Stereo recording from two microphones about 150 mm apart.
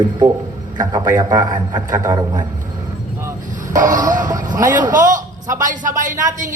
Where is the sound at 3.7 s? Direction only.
60° right (ahead or behind).